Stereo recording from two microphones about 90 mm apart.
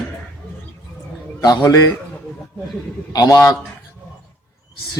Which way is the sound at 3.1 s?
45° left (ahead or behind).